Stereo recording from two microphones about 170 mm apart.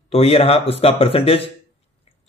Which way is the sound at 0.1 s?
35° left (ahead or behind).